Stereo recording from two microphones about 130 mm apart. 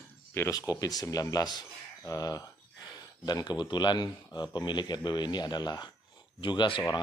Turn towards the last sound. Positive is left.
turn(degrees=35)  # may be behind; listen again after turning